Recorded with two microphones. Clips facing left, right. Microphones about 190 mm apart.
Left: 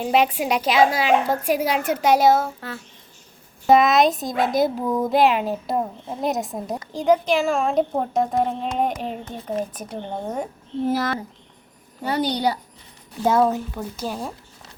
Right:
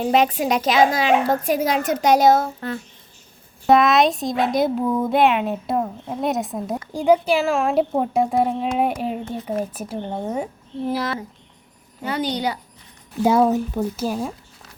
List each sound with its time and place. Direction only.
0.0 s a woman's voice: 5° left (ahead or behind)
10.8 s a woman's voice: 45° left (ahead or behind)
13.2 s speech: 10° right (ahead or behind)